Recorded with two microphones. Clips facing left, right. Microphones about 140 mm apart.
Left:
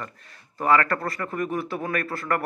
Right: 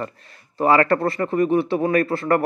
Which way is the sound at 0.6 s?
30° right (ahead or behind).